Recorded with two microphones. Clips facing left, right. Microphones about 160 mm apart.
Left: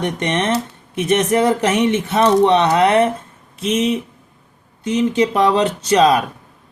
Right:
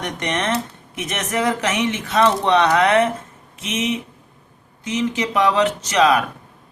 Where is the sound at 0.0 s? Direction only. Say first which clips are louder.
Left 4 dB; 30° left (ahead or behind).